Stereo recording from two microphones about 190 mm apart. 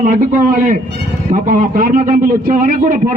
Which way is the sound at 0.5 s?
45° right (ahead or behind).